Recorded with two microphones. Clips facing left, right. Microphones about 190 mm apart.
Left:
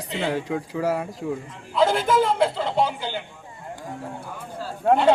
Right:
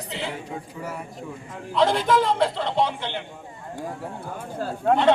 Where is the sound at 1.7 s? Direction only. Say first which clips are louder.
Left 1 dB; 5° left (ahead or behind).